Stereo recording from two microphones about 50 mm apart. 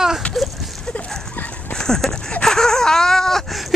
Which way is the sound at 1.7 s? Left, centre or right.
Centre.